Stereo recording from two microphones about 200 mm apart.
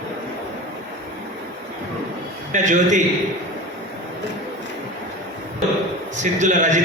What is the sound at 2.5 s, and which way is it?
Speech, 40° right (ahead or behind).